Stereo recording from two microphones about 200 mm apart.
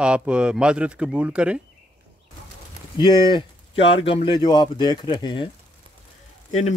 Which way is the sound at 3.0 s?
25° left (ahead or behind).